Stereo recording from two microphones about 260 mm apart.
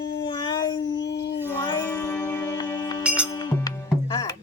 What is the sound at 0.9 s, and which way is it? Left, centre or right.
Dog, left.